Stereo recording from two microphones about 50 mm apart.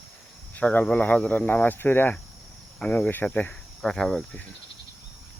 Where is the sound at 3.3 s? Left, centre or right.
Left.